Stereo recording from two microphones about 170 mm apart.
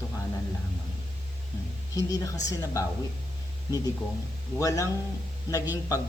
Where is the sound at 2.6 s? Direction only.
20° left (ahead or behind).